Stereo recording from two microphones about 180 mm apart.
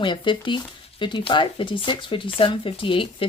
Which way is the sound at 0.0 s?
25° left (ahead or behind).